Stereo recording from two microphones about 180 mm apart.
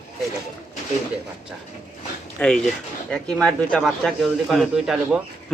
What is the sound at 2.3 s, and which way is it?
Speech, 5° left (ahead or behind).